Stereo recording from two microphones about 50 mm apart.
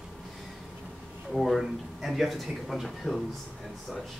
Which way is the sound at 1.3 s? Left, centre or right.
Centre.